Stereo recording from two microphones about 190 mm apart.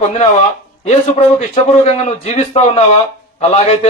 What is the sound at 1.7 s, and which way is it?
A man's voice, 35° left (ahead or behind).